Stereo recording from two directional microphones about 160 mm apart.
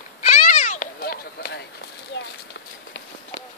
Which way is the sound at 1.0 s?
70° left (ahead or behind).